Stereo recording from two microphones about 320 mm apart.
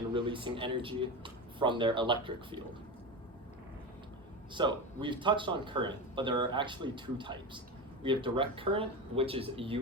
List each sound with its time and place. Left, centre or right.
0.1 s speech: centre
4.5 s speech: centre